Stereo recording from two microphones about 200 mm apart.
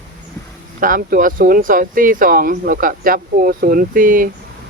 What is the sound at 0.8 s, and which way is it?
Speech, 45° right (ahead or behind).